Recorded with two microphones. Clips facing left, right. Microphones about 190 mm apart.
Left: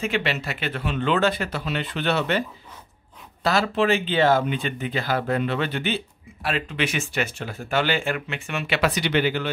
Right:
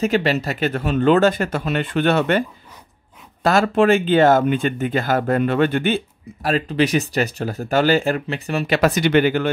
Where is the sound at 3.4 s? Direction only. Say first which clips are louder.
Right 6 dB; 50° right (ahead or behind).